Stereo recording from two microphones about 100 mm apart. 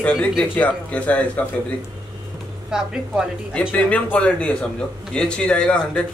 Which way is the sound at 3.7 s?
10° left (ahead or behind).